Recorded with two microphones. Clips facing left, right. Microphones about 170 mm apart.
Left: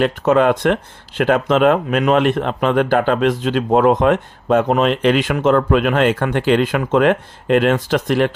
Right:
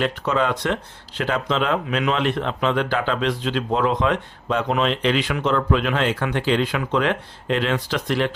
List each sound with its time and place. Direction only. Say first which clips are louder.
0.0 s speech: left 8 dB; 50° left (ahead or behind)